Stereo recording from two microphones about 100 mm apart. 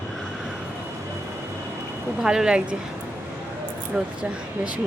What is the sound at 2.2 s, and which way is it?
Speech, 5° right (ahead or behind).